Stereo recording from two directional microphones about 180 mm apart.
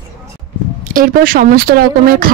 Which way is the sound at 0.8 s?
50° right (ahead or behind).